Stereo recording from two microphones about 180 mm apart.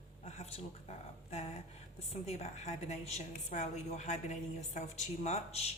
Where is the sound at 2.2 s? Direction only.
35° left (ahead or behind).